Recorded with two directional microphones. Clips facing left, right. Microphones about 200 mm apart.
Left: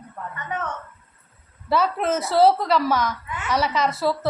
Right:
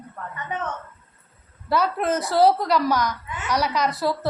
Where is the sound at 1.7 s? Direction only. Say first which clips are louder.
Left 1 dB; centre (ahead or behind).